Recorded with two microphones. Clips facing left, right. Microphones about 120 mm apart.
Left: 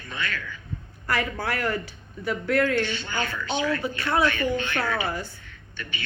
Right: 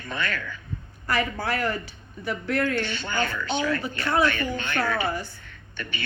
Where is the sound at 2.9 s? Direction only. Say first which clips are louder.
Right 2 dB; 45° right (ahead or behind).